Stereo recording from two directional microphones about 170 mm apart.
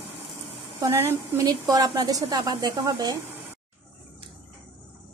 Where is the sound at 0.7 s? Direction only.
15° right (ahead or behind).